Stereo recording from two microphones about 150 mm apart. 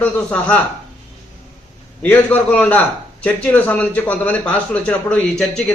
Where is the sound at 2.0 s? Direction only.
10° left (ahead or behind).